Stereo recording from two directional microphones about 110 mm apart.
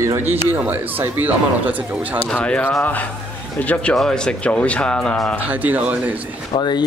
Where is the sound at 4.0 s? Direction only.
5° left (ahead or behind).